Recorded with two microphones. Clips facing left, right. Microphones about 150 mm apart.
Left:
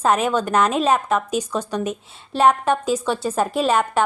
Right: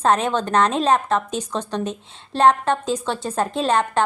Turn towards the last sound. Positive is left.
turn(degrees=10)  # may be behind; listen again after turning